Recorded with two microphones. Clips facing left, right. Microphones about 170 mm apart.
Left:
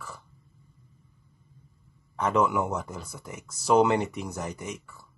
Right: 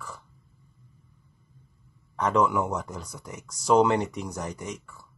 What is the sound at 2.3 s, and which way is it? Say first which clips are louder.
Speech: right 1 dB; 25° left (ahead or behind).